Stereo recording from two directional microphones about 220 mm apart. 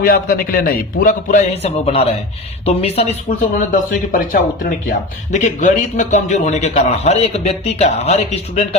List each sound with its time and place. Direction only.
0.0 s a man's voice: 40° left (ahead or behind)